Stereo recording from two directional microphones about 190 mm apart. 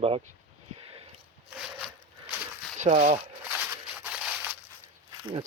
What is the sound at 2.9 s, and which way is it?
Speech, 30° right (ahead or behind).